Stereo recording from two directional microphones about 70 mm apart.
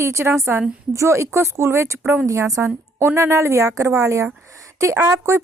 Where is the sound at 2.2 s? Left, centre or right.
Right.